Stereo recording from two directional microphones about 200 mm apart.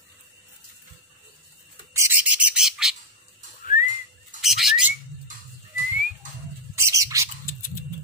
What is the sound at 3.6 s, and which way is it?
Whistling, 40° left (ahead or behind).